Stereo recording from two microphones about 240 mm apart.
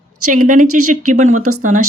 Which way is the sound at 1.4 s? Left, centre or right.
Right.